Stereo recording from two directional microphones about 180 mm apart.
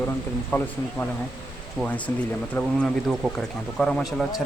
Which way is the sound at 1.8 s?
5° left (ahead or behind).